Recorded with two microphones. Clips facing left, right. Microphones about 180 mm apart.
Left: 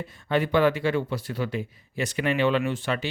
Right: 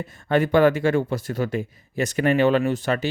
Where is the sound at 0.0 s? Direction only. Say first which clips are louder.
Right 4 dB; 45° right (ahead or behind).